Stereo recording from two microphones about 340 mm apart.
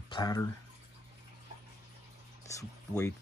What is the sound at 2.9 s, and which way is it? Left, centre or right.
Speech, centre.